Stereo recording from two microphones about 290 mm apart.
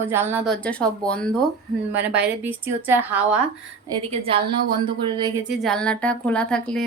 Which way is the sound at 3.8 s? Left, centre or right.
Centre.